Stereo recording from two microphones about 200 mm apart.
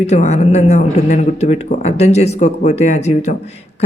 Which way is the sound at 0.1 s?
35° left (ahead or behind).